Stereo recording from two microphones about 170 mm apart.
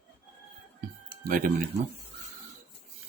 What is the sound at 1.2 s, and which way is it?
Speech, 55° right (ahead or behind).